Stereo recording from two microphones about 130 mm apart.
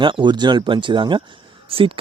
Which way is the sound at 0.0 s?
40° right (ahead or behind).